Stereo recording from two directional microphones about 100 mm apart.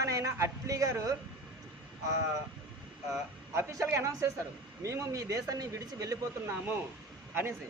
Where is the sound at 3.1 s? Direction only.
30° right (ahead or behind).